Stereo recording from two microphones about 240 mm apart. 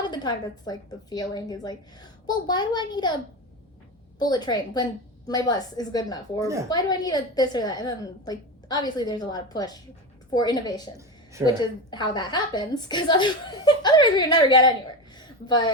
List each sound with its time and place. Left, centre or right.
0.0 s a woman's voice: centre
4.2 s a woman's voice: centre
15.2 s a sound: centre